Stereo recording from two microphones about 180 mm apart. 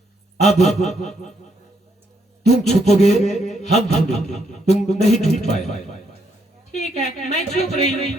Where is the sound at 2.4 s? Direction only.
40° left (ahead or behind).